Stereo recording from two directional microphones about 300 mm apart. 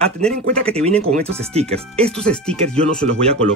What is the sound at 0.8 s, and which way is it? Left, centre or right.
Speech, right.